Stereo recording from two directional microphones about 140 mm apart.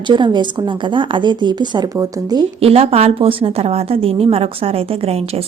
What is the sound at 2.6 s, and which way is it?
A woman's voice, 45° right (ahead or behind).